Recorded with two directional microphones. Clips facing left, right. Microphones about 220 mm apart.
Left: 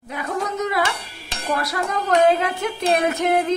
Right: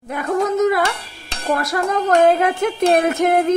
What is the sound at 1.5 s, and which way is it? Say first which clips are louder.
A woman's voice: right 5 dB; 45° right (ahead or behind).